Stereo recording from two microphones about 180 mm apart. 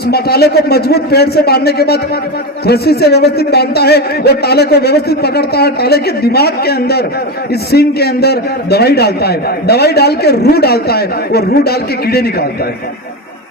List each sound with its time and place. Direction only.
0.1 s a man's voice: 60° left (ahead or behind)